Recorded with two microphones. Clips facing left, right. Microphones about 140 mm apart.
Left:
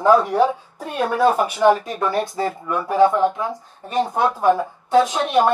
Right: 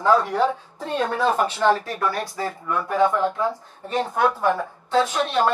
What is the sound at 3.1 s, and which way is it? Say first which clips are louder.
Speech: left 3 dB; 20° left (ahead or behind).